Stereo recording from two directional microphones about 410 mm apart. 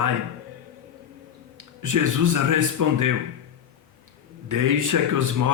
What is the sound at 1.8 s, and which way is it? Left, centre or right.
Speech, right.